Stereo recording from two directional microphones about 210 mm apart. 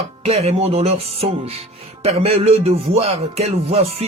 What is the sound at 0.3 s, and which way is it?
Speech, 30° right (ahead or behind).